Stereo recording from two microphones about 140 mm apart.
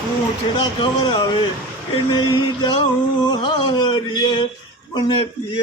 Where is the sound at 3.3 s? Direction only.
35° left (ahead or behind).